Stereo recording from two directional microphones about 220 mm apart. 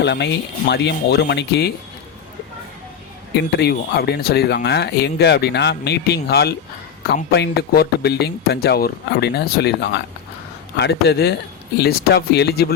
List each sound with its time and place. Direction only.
0.0 s speech: 50° left (ahead or behind)
3.5 s speech: 50° left (ahead or behind)